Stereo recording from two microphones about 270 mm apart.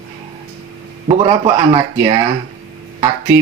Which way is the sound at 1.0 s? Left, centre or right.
Right.